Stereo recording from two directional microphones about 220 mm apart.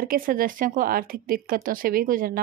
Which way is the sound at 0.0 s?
40° right (ahead or behind).